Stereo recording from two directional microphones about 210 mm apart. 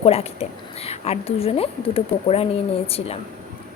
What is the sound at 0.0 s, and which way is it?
A woman's voice, 30° left (ahead or behind).